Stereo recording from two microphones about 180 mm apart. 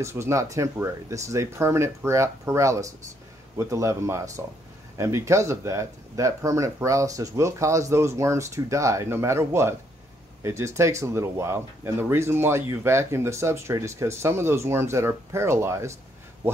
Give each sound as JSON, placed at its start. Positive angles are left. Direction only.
{"t": 0.0, "sound": "speech", "side_deg": -15}